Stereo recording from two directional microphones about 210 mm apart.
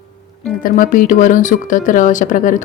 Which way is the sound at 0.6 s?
40° left (ahead or behind).